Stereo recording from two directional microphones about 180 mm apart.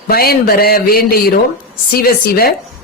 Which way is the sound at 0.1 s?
55° left (ahead or behind).